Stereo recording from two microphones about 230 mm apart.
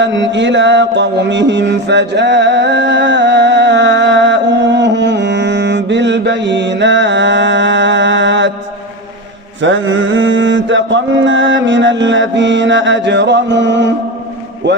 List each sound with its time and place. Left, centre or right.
0.0 s mantra: right
9.6 s mantra: right
14.6 s speech: right